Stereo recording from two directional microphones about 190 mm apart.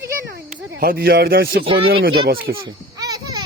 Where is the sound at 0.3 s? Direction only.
50° right (ahead or behind).